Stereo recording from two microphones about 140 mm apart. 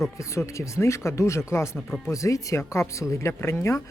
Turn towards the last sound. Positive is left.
turn(degrees=20)  # may be behind; listen again after turning